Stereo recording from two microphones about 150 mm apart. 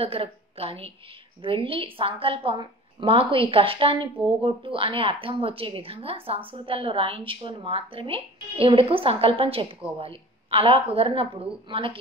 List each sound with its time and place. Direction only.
0.0 s a woman's voice: 40° right (ahead or behind)